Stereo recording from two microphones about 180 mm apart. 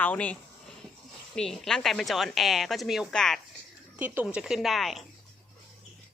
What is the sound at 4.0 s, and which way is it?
Speech, 10° right (ahead or behind).